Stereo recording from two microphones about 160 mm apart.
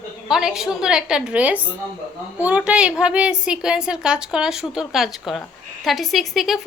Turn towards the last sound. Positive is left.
turn(degrees=0)  # may be behind; listen again after turning